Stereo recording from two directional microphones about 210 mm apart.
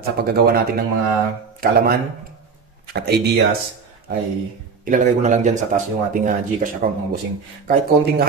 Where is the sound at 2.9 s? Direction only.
50° right (ahead or behind).